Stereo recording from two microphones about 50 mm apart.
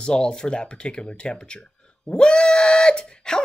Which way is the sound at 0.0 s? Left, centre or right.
Centre.